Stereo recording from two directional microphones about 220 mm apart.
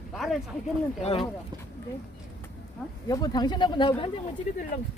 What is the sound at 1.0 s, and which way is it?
Speech, 25° left (ahead or behind).